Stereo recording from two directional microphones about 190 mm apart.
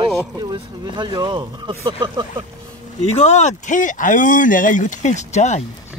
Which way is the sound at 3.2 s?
35° left (ahead or behind).